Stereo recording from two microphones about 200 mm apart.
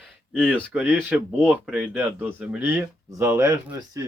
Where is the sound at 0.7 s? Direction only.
5° right (ahead or behind).